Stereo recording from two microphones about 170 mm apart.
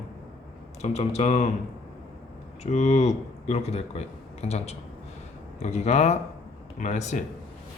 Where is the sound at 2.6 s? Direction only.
40° left (ahead or behind).